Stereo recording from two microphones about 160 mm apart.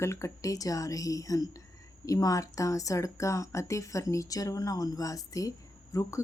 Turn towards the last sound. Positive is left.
turn(degrees=20)  # may be behind; listen again after turning